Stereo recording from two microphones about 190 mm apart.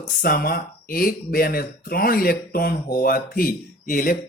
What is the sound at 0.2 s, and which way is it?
Speech, 50° left (ahead or behind).